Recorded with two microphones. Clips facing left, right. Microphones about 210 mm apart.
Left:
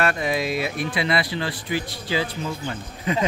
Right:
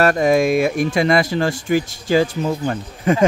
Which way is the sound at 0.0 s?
45° right (ahead or behind).